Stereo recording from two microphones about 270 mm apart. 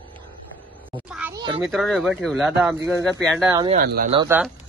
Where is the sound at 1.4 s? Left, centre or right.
Centre.